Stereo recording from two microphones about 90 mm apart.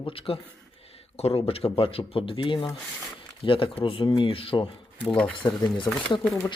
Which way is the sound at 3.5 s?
75° left (ahead or behind).